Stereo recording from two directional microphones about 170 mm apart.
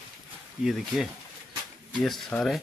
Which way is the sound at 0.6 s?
Centre (ahead or behind).